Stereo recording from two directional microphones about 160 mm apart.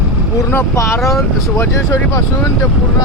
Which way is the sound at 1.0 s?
Centre (ahead or behind).